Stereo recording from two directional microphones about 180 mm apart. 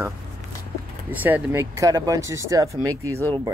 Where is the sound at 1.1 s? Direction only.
10° right (ahead or behind).